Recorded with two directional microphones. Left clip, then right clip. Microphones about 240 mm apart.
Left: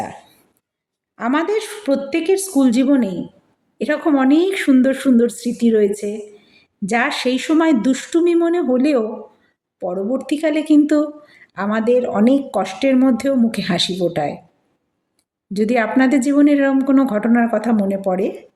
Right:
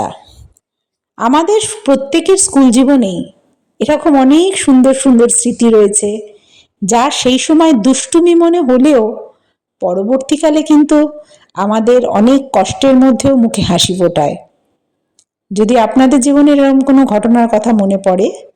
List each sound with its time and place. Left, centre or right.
1.1 s speech: right
15.5 s speech: right